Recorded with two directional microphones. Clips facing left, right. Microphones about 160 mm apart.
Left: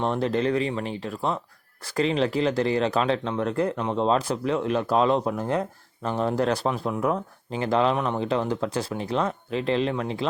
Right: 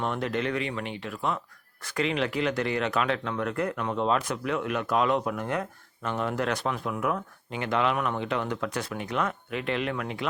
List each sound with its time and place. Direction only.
0.0 s speech: 30° left (ahead or behind)